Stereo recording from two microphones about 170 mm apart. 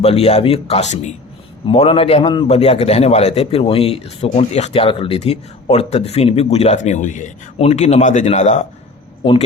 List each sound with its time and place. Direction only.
0.0 s a man's voice: 35° left (ahead or behind)